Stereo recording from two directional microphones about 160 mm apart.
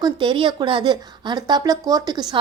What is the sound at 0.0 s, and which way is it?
A woman's voice, 30° right (ahead or behind).